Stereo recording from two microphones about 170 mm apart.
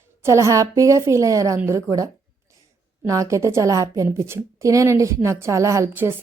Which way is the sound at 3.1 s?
20° right (ahead or behind).